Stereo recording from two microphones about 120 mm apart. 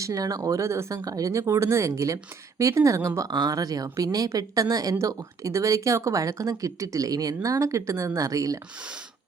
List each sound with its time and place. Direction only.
0.0 s a woman's voice: 30° right (ahead or behind)